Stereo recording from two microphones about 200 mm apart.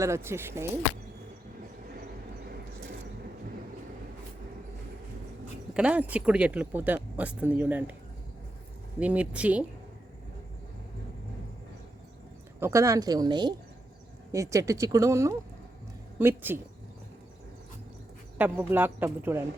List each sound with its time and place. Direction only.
0.0 s speech: 15° right (ahead or behind)
5.7 s speech: 5° right (ahead or behind)
9.0 s speech: 5° right (ahead or behind)
12.5 s a woman's voice: 15° right (ahead or behind)
18.3 s speech: 10° right (ahead or behind)